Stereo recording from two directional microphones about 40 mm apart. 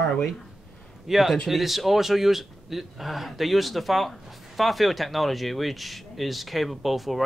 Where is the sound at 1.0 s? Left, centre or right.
Centre.